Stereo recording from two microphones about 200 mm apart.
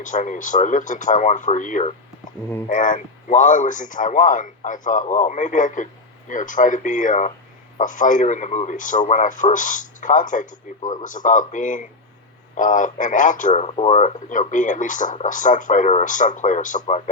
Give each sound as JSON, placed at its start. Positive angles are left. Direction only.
{"t": 0.0, "sound": "a man's voice", "side_deg": 40}